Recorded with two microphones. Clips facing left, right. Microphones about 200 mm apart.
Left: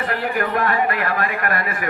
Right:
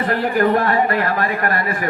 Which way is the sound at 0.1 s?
40° right (ahead or behind).